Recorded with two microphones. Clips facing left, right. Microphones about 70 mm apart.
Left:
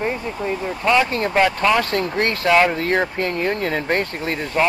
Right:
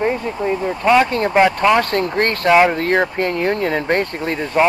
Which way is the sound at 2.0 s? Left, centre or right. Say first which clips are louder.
Right 3 dB; right.